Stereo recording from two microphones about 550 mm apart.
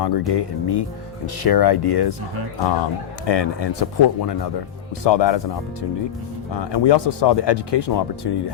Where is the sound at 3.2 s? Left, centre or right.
Left.